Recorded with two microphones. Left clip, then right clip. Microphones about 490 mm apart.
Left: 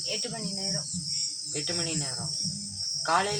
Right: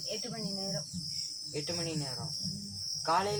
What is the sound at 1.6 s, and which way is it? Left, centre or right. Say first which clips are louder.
Speech: left 6 dB; right.